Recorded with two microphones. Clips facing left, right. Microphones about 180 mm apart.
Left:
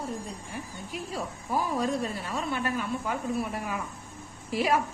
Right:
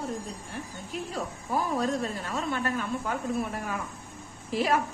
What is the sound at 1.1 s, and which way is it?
A woman's voice, 10° left (ahead or behind).